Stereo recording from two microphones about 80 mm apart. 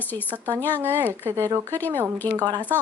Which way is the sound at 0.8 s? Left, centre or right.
Right.